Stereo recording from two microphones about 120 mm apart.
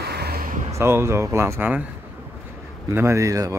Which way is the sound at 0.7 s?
20° right (ahead or behind).